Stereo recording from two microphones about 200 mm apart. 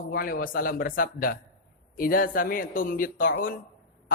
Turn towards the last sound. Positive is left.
turn(degrees=45)  # may be behind; listen again after turning